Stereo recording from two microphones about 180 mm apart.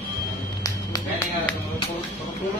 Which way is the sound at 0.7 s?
20° left (ahead or behind).